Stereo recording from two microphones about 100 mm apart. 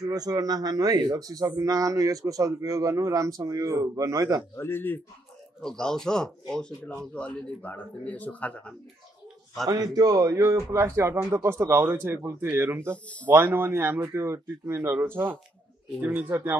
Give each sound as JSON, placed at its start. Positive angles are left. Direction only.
{"t": 0.0, "sound": "a man's voice", "side_deg": -40}
{"t": 4.6, "sound": "a man's voice", "side_deg": 20}
{"t": 5.6, "sound": "speech", "side_deg": 5}
{"t": 9.7, "sound": "speech", "side_deg": -40}
{"t": 12.9, "sound": "speech", "side_deg": 15}
{"t": 13.3, "sound": "speech", "side_deg": -20}